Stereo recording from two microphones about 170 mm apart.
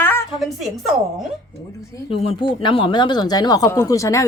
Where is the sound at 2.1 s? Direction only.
35° left (ahead or behind).